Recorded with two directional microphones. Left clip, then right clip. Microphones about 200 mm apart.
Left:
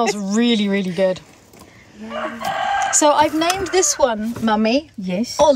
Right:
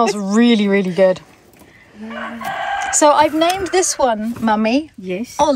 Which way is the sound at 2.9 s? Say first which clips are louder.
Right 4 dB; 5° left (ahead or behind).